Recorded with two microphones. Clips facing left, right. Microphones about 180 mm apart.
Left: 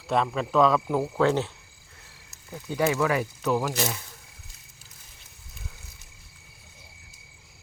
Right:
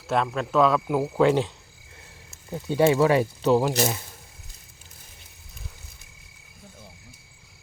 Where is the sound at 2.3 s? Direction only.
25° right (ahead or behind).